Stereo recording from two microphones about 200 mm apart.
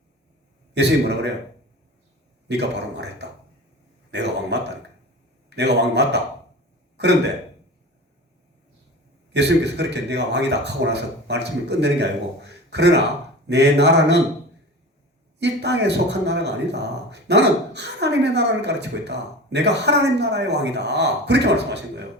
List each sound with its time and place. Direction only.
0.7 s a man's voice: 55° right (ahead or behind)
2.5 s a man's voice: 55° right (ahead or behind)
9.3 s a man's voice: 60° right (ahead or behind)
12.5 s a sound: 60° right (ahead or behind)
13.5 s a man's voice: 60° right (ahead or behind)
15.4 s a man's voice: 60° right (ahead or behind)